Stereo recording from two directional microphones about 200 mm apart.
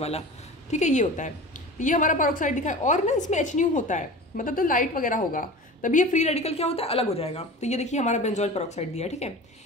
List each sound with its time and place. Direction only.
0.7 s a woman's voice: 35° left (ahead or behind)